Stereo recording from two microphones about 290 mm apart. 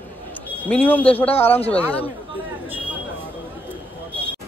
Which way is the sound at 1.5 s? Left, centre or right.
Left.